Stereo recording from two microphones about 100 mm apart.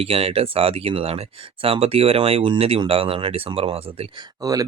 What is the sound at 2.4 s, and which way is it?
Speech, 70° right (ahead or behind).